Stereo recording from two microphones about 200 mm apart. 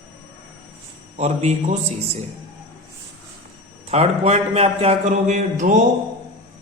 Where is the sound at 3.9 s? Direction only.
30° right (ahead or behind).